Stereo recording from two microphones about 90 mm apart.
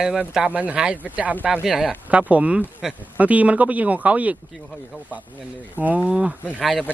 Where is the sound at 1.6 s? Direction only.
5° right (ahead or behind).